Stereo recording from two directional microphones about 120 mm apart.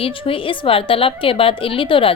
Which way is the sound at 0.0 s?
45° left (ahead or behind).